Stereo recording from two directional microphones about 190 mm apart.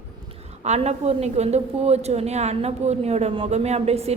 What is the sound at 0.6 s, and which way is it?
A woman's voice, 35° right (ahead or behind).